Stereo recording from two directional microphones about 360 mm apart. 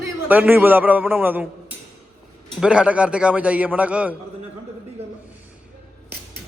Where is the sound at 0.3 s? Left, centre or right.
Centre.